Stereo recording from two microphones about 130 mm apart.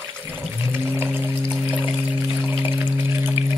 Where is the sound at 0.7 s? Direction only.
15° right (ahead or behind).